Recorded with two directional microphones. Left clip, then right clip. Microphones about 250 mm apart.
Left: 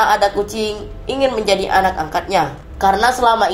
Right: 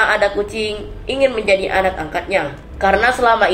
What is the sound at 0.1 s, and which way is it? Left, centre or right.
A woman's voice, left.